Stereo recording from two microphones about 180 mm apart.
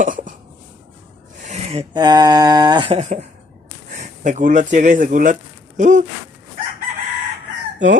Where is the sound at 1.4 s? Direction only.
35° right (ahead or behind).